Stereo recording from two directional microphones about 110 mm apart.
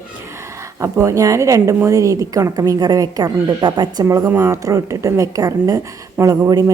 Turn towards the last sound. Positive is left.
turn(degrees=-30)  # may be behind; listen again after turning